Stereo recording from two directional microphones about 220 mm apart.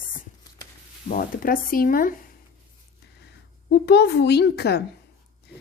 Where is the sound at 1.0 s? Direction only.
40° left (ahead or behind).